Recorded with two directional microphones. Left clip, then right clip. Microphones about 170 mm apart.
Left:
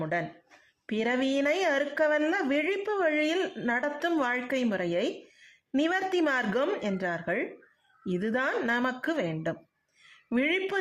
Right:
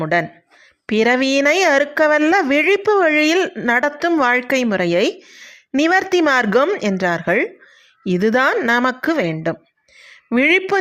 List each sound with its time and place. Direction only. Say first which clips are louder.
0.0 s speech: right 13 dB; 45° right (ahead or behind)